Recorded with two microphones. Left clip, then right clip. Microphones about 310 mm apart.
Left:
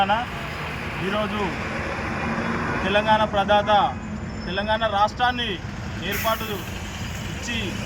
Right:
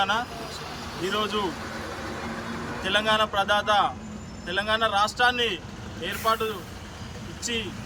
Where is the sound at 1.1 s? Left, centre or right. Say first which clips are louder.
Left 1 dB; right.